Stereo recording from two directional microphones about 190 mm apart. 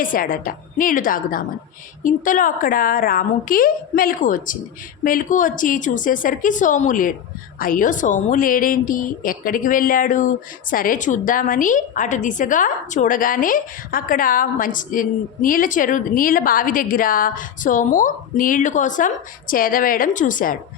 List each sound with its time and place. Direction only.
0.0 s a woman's voice: 45° left (ahead or behind)